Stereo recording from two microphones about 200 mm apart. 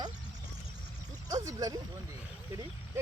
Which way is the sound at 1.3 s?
15° right (ahead or behind).